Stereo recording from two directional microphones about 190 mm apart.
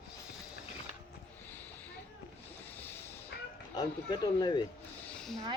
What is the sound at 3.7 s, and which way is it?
Speech, 20° left (ahead or behind).